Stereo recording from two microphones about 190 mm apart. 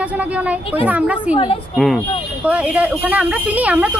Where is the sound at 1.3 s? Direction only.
30° left (ahead or behind).